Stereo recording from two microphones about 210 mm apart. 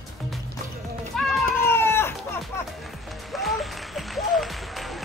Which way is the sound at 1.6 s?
10° left (ahead or behind).